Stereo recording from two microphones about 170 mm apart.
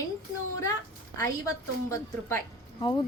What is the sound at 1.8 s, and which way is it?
Speech, 15° left (ahead or behind).